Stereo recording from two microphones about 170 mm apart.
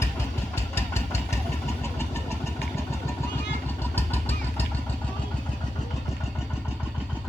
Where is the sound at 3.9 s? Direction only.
10° left (ahead or behind).